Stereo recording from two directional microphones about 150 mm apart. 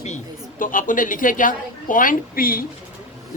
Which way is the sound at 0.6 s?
65° left (ahead or behind).